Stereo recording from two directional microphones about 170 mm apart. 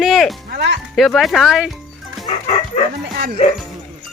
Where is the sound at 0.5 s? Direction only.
80° right.